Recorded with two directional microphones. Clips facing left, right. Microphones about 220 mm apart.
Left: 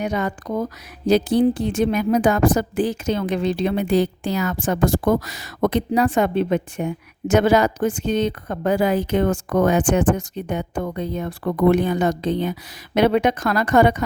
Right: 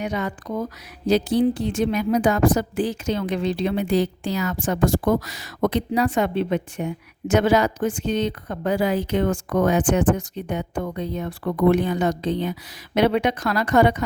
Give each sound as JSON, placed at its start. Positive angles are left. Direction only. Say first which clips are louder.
{"t": 0.0, "sound": "a woman's voice", "louder": "left 3 dB", "side_deg": 45}